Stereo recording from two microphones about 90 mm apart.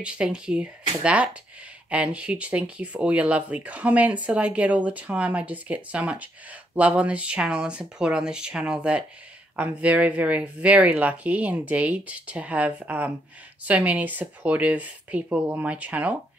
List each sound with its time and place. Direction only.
0.0 s speech: 10° right (ahead or behind)